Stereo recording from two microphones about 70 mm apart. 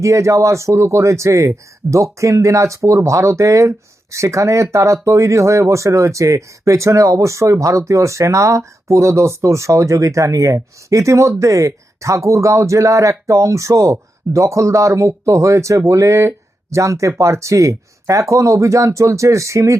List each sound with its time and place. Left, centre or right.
0.0 s speech: right